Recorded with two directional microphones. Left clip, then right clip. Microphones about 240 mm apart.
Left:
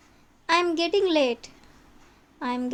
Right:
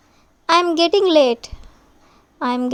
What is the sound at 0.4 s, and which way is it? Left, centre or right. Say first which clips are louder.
A woman's voice: right 8 dB; right.